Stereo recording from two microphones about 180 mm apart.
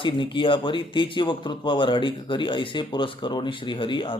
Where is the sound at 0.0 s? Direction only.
25° left (ahead or behind).